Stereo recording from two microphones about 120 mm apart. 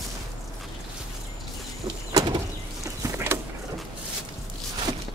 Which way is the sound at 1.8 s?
35° right (ahead or behind).